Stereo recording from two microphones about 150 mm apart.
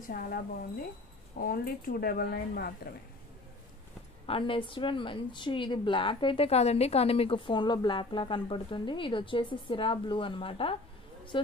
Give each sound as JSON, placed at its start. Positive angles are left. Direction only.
{"t": 0.1, "sound": "speech", "side_deg": 75}
{"t": 4.3, "sound": "speech", "side_deg": 35}